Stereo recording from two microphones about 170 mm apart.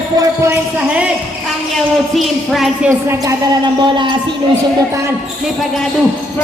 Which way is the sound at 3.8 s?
30° right (ahead or behind).